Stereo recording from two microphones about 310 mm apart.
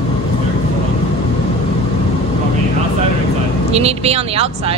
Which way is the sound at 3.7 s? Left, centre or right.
Centre.